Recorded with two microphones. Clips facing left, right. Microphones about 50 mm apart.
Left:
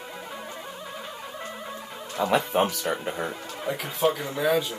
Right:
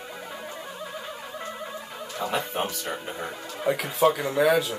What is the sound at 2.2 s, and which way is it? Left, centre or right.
Speech, left.